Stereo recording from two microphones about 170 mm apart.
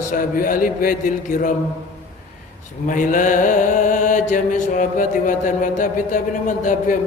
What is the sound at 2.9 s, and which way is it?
Mantra, 50° left (ahead or behind).